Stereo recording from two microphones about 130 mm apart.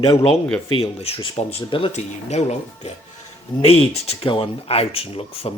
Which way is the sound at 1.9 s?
60° left (ahead or behind).